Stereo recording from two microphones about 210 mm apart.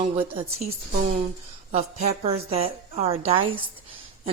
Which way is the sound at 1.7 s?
30° right (ahead or behind).